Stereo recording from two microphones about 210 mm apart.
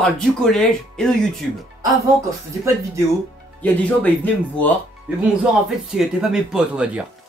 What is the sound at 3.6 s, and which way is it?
Speech, 5° left (ahead or behind).